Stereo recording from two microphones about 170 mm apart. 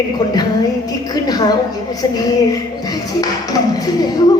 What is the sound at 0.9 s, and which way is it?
Music, 20° left (ahead or behind).